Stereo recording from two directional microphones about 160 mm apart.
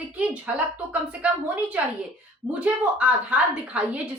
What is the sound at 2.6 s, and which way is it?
A woman's voice, 10° right (ahead or behind).